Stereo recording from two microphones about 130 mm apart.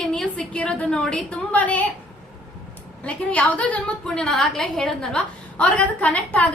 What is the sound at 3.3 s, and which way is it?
A woman's voice, 10° left (ahead or behind).